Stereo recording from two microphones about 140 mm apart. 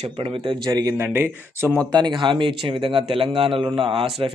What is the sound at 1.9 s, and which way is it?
Speech, 35° right (ahead or behind).